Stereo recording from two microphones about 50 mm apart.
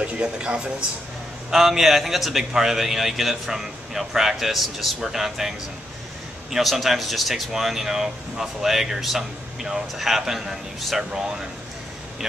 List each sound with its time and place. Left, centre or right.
0.0 s speech: right
1.5 s speech: centre
6.5 s speech: centre
11.1 s speech: centre